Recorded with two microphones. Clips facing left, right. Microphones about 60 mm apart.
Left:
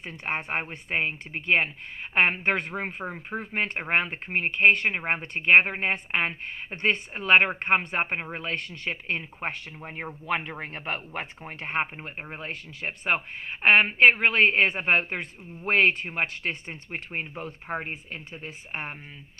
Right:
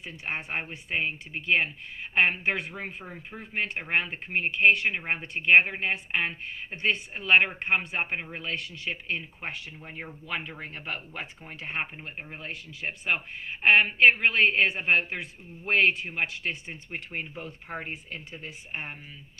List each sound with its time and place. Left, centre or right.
0.0 s speech: left
2.5 s speech: left
2.7 s speech: left
4.9 s speech: left
16.9 s speech: left